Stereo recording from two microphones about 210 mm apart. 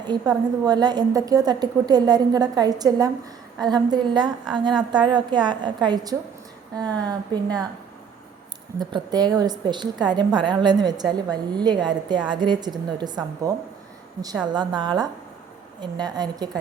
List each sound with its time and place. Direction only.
0.1 s a woman's voice: 20° right (ahead or behind)
8.8 s a woman's voice: 20° right (ahead or behind)
14.5 s a woman's voice: 20° right (ahead or behind)